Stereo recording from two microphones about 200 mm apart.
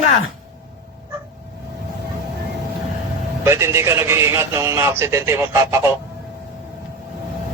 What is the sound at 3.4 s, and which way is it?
A man's voice, 15° right (ahead or behind).